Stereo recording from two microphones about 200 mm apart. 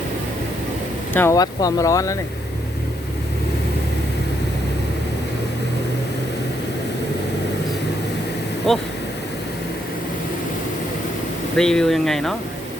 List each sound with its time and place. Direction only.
1.1 s speech: 15° left (ahead or behind)
8.7 s speech: centre (ahead or behind)
11.5 s speech: 5° left (ahead or behind)